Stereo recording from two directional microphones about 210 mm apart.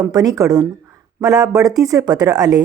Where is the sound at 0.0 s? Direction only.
15° right (ahead or behind).